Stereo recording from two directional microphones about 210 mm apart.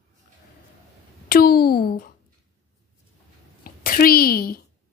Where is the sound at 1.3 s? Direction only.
45° left (ahead or behind).